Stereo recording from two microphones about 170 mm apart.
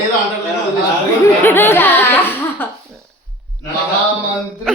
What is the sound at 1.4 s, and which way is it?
A woman's voice, 10° left (ahead or behind).